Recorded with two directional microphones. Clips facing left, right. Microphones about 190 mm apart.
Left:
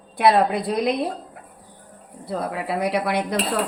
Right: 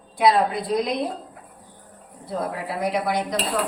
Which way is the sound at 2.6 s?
65° left (ahead or behind).